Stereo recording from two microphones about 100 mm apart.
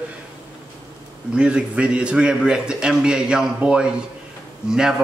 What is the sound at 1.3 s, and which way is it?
A man's voice, 10° right (ahead or behind).